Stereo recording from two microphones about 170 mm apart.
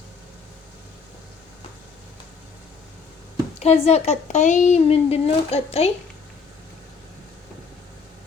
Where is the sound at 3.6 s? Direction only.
40° left (ahead or behind).